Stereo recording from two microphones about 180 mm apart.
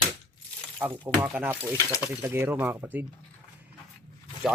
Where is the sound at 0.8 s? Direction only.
10° right (ahead or behind).